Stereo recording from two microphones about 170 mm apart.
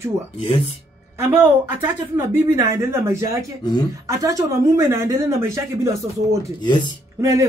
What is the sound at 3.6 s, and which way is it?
Speech, 25° left (ahead or behind).